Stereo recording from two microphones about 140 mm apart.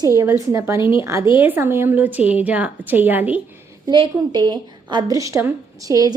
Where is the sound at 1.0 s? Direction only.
20° right (ahead or behind).